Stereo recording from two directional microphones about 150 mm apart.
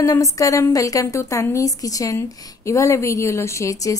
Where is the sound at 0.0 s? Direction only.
20° left (ahead or behind).